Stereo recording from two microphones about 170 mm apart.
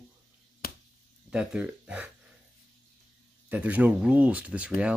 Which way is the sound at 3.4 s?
10° right (ahead or behind).